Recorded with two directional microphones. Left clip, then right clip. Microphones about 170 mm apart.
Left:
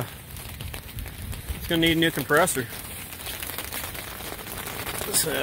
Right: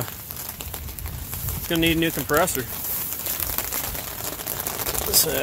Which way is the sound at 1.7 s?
5° left (ahead or behind).